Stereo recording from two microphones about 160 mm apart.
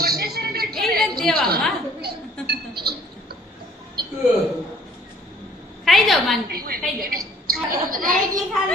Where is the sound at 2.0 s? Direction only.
90° right.